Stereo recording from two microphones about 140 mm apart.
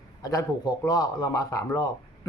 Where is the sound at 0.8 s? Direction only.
25° left (ahead or behind).